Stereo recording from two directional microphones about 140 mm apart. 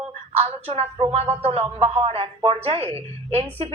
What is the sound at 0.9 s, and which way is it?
A woman's voice, 45° right (ahead or behind).